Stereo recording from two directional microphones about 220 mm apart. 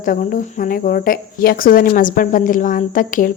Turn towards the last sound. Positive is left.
turn(degrees=40)  # may be behind; listen again after turning